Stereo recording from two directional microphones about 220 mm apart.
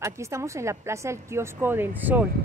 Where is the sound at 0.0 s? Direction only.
15° right (ahead or behind).